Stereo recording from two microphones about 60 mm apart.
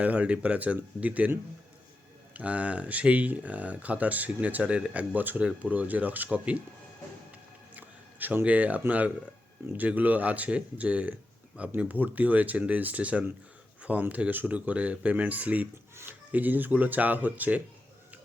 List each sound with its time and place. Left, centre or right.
0.0 s speech: right
2.3 s speech: right
7.8 s a sound: right
8.4 s speech: right